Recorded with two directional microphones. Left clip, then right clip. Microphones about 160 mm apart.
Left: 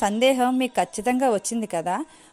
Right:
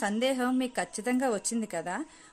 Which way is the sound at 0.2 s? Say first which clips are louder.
Left 10 dB; 35° left (ahead or behind).